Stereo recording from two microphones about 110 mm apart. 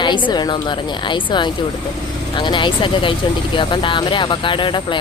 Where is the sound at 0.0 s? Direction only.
45° left (ahead or behind).